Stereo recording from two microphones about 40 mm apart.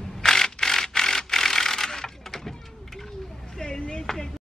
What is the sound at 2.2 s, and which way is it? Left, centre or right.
Vehicle, centre.